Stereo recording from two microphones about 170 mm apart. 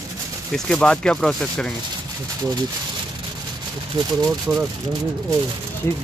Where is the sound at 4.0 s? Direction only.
25° right (ahead or behind).